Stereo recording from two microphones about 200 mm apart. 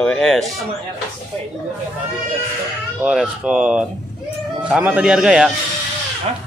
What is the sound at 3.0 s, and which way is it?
Speech, 5° right (ahead or behind).